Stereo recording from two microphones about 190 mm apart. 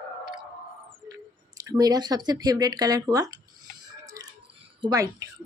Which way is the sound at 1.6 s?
20° right (ahead or behind).